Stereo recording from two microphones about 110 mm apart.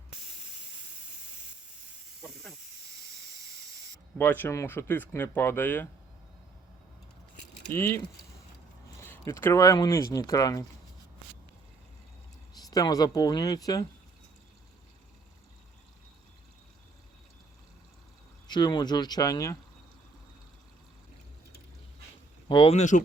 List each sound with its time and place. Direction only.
2.2 s snake: centre (ahead or behind)
4.2 s speech: 20° left (ahead or behind)
7.7 s speech: 20° left (ahead or behind)
12.5 s speech: 35° left (ahead or behind)
18.4 s speech: 40° left (ahead or behind)
22.4 s speech: 50° left (ahead or behind)